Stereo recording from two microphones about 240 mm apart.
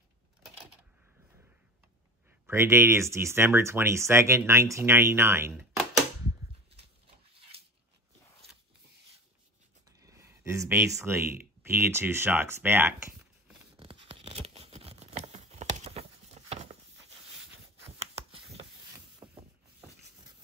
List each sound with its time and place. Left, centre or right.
2.4 s speech: centre
9.8 s speech: centre
13.7 s tearing: right
18.3 s a sound: right
19.2 s vehicle: centre